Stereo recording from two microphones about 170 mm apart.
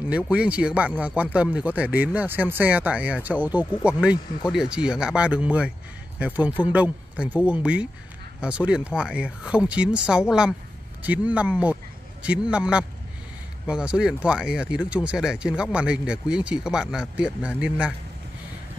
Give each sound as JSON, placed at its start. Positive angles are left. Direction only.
{"t": 0.3, "sound": "speech", "side_deg": -5}